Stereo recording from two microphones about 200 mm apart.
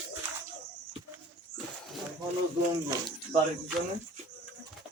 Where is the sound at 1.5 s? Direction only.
5° left (ahead or behind).